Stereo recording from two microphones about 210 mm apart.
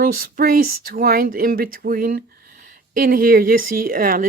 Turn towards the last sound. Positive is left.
turn(degrees=-40)  # may be behind; listen again after turning